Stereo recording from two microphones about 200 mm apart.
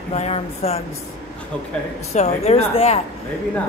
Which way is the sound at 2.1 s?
35° left (ahead or behind).